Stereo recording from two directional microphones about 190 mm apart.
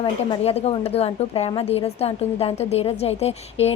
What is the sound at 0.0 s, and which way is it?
A woman's voice, 30° left (ahead or behind).